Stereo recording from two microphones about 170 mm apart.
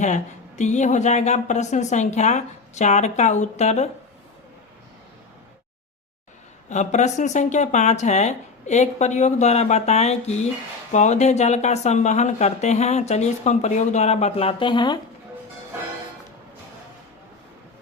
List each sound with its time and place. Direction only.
0.0 s speech: 45° left (ahead or behind)
6.7 s speech: 45° left (ahead or behind); by 14.9 s 25° left (ahead or behind)